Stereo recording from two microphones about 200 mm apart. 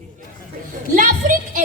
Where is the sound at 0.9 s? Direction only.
40° right (ahead or behind).